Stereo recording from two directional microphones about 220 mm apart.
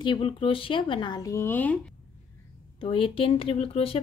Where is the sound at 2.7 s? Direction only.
25° left (ahead or behind).